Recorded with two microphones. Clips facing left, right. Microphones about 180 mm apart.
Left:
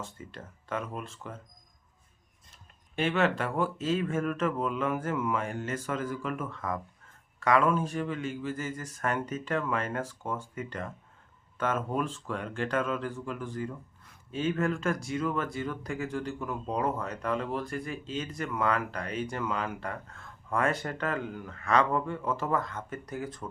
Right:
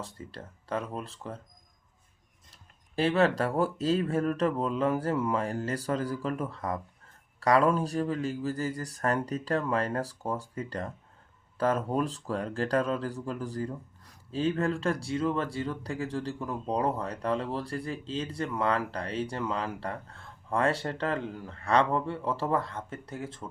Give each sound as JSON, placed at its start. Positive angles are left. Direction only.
{"t": 0.0, "sound": "speech", "side_deg": -35}
{"t": 2.9, "sound": "speech", "side_deg": -35}